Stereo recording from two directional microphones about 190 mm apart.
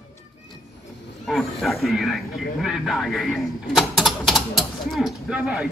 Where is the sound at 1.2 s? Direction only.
Centre (ahead or behind).